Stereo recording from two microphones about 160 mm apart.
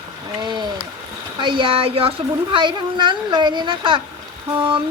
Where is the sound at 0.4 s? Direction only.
25° right (ahead or behind).